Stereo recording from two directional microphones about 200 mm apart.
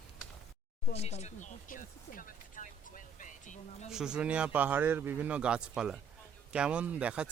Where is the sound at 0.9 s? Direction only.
30° left (ahead or behind).